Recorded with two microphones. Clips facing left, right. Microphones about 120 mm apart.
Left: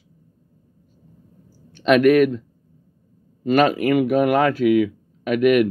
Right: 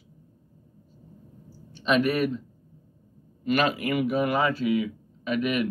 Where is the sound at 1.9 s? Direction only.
70° left (ahead or behind).